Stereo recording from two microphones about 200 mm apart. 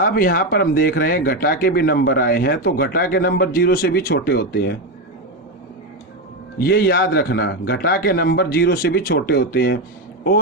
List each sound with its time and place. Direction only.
0.0 s speech: 45° left (ahead or behind)
6.6 s speech: 50° left (ahead or behind)